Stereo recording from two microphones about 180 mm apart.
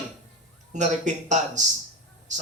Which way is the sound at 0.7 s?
40° right (ahead or behind).